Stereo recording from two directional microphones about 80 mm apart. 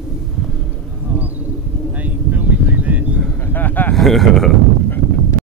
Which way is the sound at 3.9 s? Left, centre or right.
Centre.